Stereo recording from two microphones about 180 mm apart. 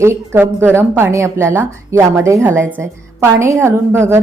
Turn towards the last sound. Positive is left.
turn(degrees=-15)  # may be behind; listen again after turning